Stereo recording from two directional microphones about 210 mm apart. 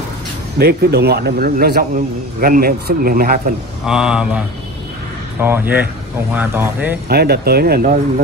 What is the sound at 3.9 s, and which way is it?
Speech, 5° right (ahead or behind).